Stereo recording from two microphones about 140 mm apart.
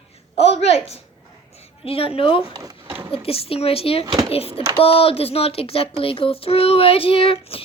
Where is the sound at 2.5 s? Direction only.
25° right (ahead or behind).